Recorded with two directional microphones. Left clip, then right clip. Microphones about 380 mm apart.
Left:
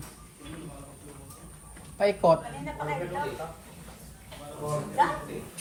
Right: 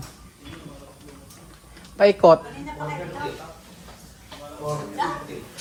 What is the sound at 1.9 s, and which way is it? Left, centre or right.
Speech, centre.